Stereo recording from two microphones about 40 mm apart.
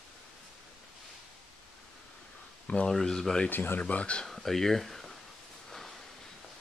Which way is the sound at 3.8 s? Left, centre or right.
Left.